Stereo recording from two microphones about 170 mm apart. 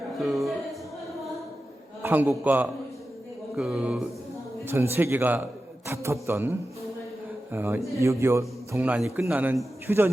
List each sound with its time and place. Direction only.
0.2 s music: centre (ahead or behind)
2.0 s a sound: 10° right (ahead or behind)
2.4 s a man's voice: 10° right (ahead or behind)
4.6 s a man's voice: 15° right (ahead or behind)